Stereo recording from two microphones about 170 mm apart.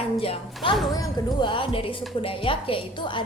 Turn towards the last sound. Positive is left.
turn(degrees=30)  # may be behind; listen again after turning